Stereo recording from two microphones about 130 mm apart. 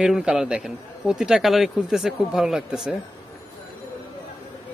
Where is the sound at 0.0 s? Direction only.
5° right (ahead or behind).